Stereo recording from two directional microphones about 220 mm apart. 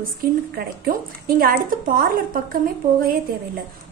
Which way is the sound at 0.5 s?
40° right (ahead or behind).